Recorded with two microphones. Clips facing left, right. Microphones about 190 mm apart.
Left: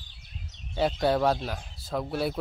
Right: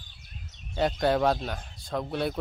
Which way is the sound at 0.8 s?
Centre (ahead or behind).